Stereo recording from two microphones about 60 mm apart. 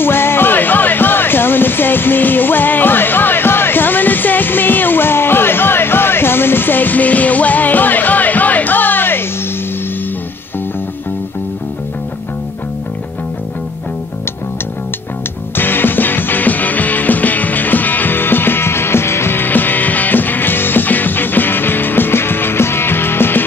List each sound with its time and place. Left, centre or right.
0.0 s music: left
15.5 s music: left